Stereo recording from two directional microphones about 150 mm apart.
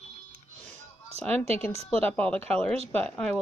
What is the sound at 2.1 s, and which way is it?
Speech, 5° left (ahead or behind).